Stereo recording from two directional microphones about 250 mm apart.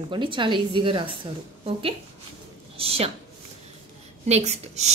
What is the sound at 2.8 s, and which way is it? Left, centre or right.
Speech, right.